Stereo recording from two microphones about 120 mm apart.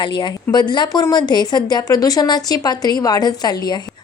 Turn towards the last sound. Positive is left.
turn(degrees=35)  # may be behind; listen again after turning